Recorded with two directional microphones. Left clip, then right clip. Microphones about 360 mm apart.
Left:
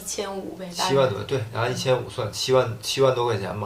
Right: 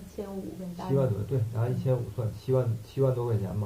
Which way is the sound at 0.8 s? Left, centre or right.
Centre.